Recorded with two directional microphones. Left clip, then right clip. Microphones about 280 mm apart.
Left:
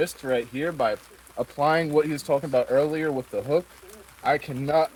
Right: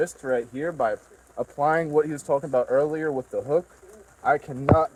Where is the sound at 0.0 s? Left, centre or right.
Left.